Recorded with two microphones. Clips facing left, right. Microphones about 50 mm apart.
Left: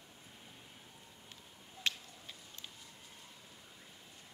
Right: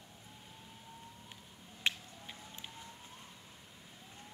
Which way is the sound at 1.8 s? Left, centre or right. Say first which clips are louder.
Right 2 dB; centre.